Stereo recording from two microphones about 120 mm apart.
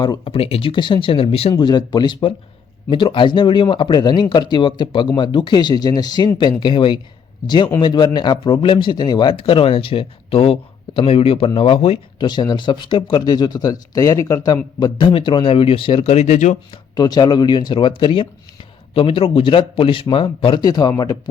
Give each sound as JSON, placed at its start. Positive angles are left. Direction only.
{"t": 0.3, "sound": "speech", "side_deg": 55}
{"t": 1.6, "sound": "speech", "side_deg": 35}
{"t": 12.2, "sound": "speech", "side_deg": 40}
{"t": 16.9, "sound": "speech", "side_deg": 35}